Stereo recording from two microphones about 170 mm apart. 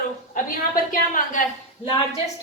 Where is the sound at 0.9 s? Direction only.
50° left (ahead or behind).